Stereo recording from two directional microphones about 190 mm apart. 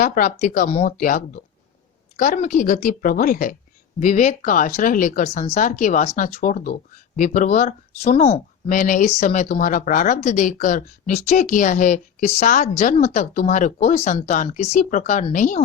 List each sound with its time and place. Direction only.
0.0 s a woman's voice: 45° left (ahead or behind)